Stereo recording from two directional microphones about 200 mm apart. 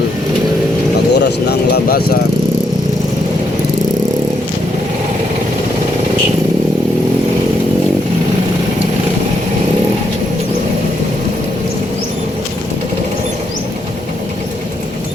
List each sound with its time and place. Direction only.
1.1 s speech: 55° left (ahead or behind)